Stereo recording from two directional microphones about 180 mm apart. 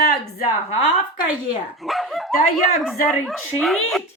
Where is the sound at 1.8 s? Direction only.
Centre (ahead or behind).